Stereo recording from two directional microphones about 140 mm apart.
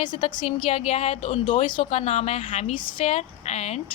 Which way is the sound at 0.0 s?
35° left (ahead or behind).